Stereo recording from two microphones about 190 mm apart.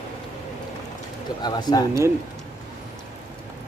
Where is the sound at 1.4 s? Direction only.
20° left (ahead or behind).